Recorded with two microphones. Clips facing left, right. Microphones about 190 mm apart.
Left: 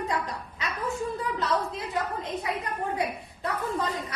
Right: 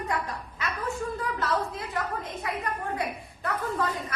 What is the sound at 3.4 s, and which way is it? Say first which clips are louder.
Speech: even; 20° left (ahead or behind).